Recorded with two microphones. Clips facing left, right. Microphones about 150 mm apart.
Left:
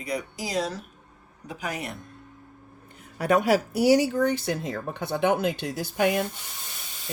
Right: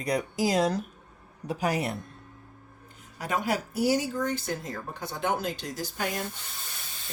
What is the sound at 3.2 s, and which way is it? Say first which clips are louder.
Speech: left 8 dB; 65° left (ahead or behind).